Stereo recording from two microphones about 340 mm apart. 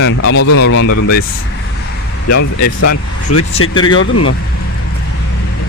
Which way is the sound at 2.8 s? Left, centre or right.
Left.